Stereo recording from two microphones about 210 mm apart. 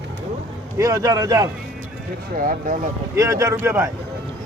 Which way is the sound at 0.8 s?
15° right (ahead or behind).